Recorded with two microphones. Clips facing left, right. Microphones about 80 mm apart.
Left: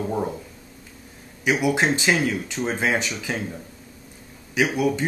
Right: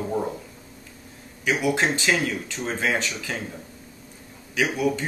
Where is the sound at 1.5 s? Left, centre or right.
Centre.